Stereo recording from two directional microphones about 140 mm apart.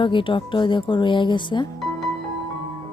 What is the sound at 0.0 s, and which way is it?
Speech, 35° left (ahead or behind).